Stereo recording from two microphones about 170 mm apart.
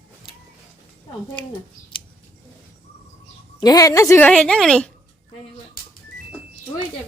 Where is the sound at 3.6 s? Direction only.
20° left (ahead or behind); by 4.9 s 5° left (ahead or behind).